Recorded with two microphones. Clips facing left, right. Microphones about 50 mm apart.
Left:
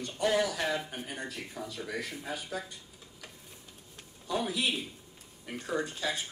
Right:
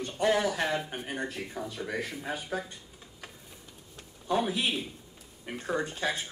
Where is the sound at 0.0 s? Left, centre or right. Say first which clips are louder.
Right 2 dB; right.